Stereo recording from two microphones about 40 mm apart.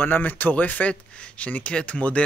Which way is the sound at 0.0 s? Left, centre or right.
Left.